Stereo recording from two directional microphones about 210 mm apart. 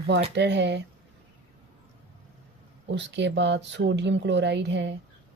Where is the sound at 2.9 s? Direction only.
55° right (ahead or behind).